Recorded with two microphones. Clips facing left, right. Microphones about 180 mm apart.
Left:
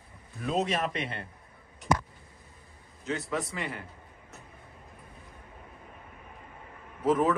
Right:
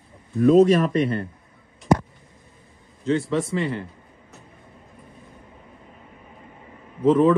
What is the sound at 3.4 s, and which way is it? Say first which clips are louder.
Speech: right 11 dB; 25° right (ahead or behind).